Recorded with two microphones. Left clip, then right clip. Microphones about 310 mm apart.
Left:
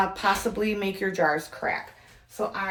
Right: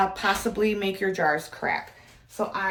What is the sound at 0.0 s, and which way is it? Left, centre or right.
Speech, centre.